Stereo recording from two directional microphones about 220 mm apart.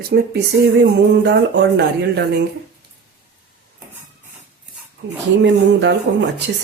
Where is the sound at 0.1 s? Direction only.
45° right (ahead or behind).